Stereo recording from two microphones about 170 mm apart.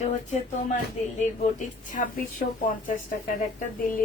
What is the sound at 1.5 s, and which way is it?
Speech, 50° left (ahead or behind).